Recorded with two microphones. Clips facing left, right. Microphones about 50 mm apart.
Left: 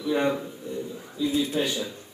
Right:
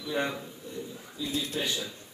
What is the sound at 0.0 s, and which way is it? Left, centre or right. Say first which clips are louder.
A man's voice: left 7 dB; centre.